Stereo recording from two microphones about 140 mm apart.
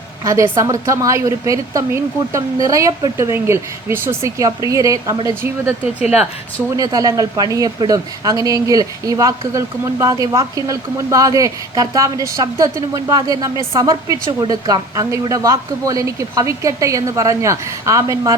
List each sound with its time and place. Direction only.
0.3 s speech: 25° right (ahead or behind)
6.7 s speech: 25° right (ahead or behind)